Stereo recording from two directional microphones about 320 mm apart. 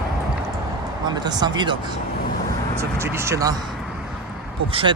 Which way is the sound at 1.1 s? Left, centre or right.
Centre.